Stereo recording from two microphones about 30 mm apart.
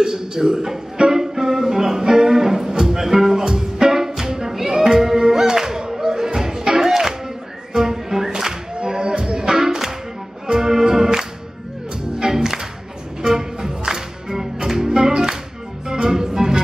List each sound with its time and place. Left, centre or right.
0.0 s music: right
12.3 s music: centre